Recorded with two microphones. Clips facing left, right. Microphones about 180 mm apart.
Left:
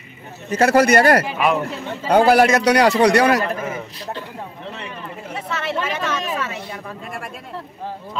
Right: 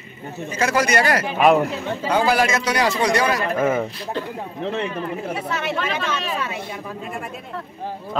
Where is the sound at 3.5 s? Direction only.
50° right (ahead or behind).